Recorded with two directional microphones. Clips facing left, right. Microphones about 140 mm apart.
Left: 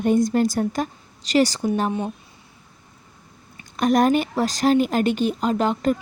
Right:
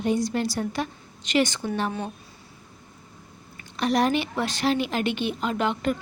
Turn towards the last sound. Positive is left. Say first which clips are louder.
# left 5 dB
turn(degrees=40)  # may be behind; listen again after turning